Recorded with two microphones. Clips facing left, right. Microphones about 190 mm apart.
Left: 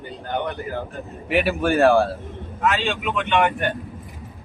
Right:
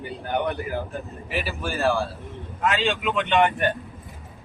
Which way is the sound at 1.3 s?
65° left (ahead or behind).